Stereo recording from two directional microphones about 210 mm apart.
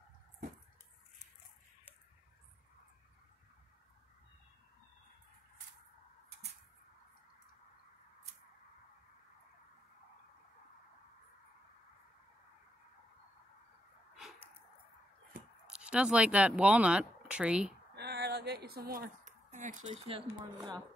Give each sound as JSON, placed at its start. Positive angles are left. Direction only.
{"t": 15.6, "sound": "speech", "side_deg": -5}
{"t": 17.9, "sound": "a woman's voice", "side_deg": -50}